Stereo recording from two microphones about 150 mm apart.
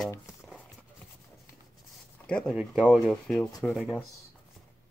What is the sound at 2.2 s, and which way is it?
Speech, 5° left (ahead or behind).